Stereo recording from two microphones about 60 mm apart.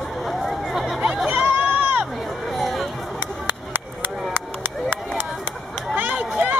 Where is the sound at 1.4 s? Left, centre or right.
Right.